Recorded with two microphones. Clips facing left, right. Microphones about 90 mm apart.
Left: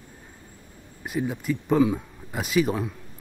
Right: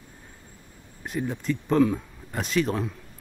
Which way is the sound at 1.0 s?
5° left (ahead or behind).